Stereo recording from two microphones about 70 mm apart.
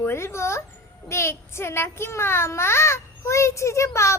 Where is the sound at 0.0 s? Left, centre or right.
Left.